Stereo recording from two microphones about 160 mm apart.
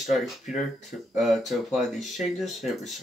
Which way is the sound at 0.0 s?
Centre (ahead or behind).